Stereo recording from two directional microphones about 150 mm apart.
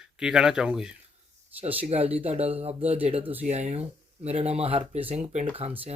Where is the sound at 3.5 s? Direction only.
50° right (ahead or behind).